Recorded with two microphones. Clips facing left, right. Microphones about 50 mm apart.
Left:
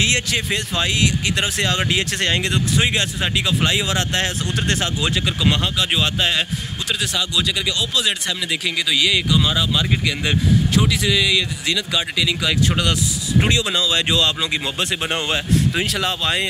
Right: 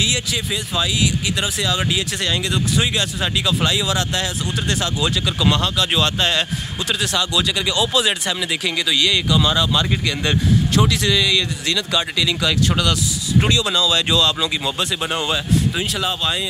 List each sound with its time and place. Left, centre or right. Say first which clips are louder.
0.0 s speech: left 2 dB; left
15.7 s speech: left 1 dB; left